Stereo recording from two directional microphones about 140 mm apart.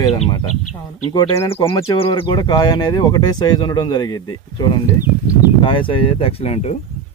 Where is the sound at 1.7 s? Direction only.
35° left (ahead or behind).